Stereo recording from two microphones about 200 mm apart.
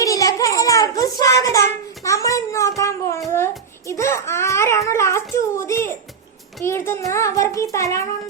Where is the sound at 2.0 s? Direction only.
15° left (ahead or behind).